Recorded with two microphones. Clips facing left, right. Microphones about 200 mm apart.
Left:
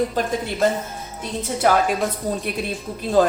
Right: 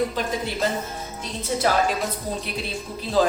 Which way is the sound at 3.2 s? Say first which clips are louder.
Left 3 dB; 50° left (ahead or behind).